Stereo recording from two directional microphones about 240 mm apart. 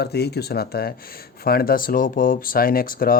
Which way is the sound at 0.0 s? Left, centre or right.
Left.